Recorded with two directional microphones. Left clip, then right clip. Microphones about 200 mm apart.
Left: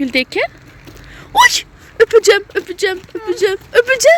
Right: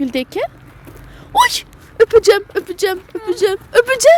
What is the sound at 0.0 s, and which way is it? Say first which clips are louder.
Speech: left 4 dB; centre (ahead or behind).